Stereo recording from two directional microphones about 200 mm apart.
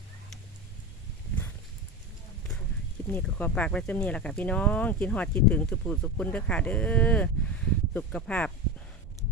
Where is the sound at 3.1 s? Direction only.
5° left (ahead or behind).